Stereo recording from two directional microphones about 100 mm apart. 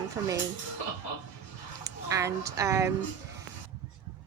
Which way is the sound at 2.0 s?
30° right (ahead or behind).